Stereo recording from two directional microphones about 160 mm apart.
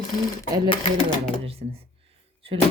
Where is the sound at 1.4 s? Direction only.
35° right (ahead or behind).